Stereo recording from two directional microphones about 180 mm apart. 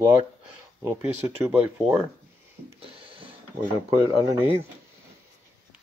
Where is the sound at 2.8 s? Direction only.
30° right (ahead or behind).